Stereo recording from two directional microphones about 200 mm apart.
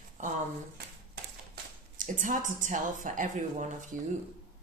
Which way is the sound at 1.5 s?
40° right (ahead or behind).